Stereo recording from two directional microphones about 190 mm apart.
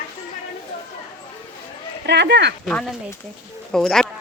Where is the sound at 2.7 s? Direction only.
5° left (ahead or behind).